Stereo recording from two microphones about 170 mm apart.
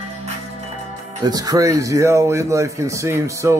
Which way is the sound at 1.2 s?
20° right (ahead or behind).